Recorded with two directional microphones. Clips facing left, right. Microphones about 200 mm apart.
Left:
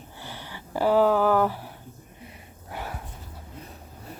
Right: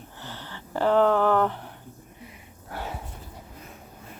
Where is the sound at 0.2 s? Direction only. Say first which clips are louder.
Even; 10° left (ahead or behind).